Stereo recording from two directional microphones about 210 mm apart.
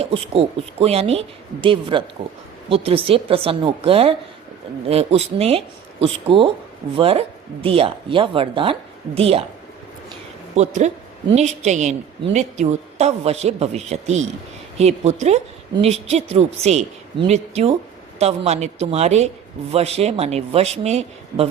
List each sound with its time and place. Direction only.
0.0 s speech: 25° right (ahead or behind)
10.5 s a man's voice: 35° right (ahead or behind)